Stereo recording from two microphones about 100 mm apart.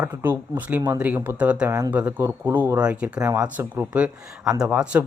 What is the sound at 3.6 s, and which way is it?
Speech, 25° right (ahead or behind).